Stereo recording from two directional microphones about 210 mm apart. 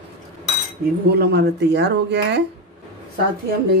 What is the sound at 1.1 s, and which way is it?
Speech, 50° right (ahead or behind).